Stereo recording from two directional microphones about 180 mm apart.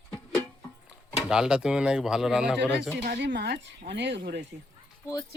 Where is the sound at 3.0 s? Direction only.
70° right (ahead or behind).